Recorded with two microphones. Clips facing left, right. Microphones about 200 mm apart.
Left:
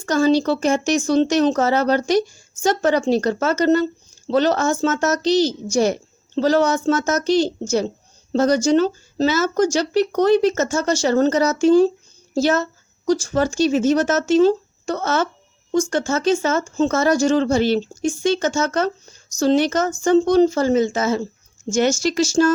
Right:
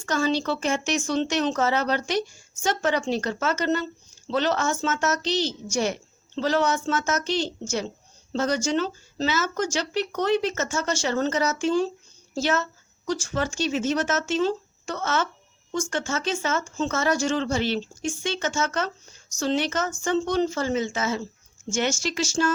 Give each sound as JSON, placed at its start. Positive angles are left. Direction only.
{"t": 0.0, "sound": "speech", "side_deg": 40}